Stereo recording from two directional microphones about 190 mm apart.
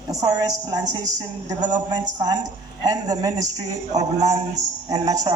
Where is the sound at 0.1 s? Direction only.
20° right (ahead or behind).